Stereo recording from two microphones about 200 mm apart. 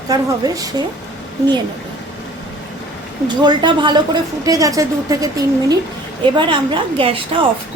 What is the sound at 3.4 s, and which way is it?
A woman's voice, 20° right (ahead or behind).